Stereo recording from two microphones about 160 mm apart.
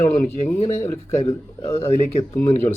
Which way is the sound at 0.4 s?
40° left (ahead or behind).